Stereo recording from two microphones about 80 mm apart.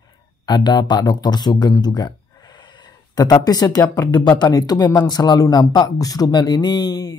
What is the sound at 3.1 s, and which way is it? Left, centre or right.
Speech, left.